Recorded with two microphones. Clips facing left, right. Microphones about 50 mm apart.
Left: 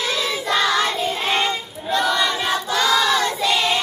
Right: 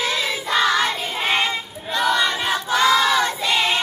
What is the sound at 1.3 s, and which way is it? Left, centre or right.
Child singing, centre.